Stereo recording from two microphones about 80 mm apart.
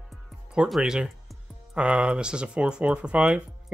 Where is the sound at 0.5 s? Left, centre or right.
Centre.